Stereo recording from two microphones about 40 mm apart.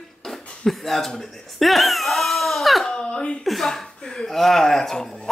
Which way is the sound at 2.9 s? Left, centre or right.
Left.